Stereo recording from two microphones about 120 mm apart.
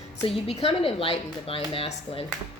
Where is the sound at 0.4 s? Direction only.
55° left (ahead or behind).